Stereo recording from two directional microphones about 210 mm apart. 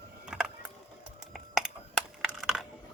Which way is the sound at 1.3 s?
Centre (ahead or behind).